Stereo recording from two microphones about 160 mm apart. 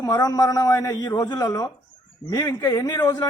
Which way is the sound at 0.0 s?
25° left (ahead or behind).